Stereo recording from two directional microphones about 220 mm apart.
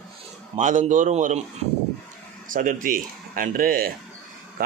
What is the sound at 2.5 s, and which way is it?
A man's voice, 40° right (ahead or behind).